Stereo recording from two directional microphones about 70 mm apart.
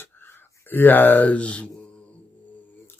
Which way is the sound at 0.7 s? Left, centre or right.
Left.